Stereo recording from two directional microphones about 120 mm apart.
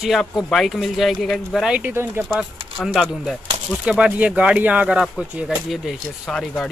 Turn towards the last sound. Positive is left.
turn(degrees=5)  # may be behind; listen again after turning